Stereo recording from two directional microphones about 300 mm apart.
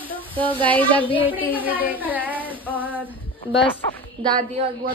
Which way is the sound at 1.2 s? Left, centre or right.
Centre.